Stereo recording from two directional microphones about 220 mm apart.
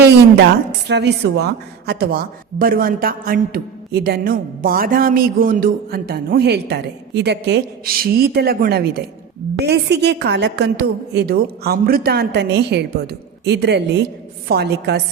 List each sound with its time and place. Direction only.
0.9 s a man's voice: 50° right (ahead or behind)